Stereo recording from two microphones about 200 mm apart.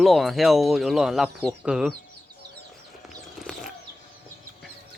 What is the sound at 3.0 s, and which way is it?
Clip-clop, centre (ahead or behind).